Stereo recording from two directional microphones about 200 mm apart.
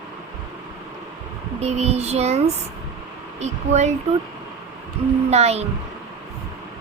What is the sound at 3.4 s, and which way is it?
Child singing, 35° right (ahead or behind).